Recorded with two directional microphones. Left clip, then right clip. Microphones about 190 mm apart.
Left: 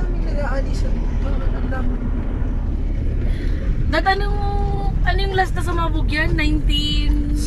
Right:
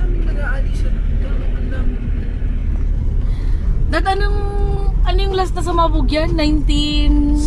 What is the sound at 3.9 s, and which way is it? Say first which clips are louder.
Speech: even; 5° right (ahead or behind).